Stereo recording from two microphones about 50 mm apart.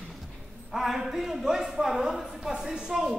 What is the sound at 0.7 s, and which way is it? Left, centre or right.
A man's voice, centre.